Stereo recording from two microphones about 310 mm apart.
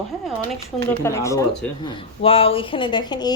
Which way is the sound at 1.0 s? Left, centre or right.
Centre.